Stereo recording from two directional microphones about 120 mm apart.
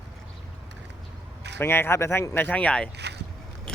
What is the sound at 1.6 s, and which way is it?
Speech, 20° left (ahead or behind).